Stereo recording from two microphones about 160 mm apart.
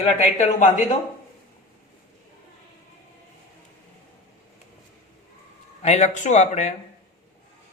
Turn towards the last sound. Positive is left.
turn(degrees=45)  # may be behind; listen again after turning